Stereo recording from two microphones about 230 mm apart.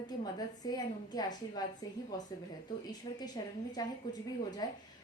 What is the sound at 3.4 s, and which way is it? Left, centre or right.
A woman's voice, centre.